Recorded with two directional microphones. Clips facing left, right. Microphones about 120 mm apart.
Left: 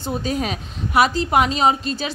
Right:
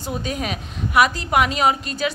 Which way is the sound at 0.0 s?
35° left (ahead or behind).